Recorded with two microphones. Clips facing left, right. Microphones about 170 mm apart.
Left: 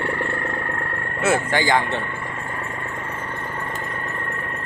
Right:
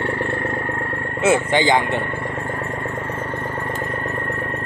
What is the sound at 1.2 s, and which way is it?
Speech, 20° right (ahead or behind).